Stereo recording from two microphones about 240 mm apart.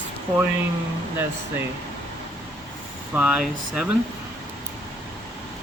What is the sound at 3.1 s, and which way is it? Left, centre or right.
Speech, centre.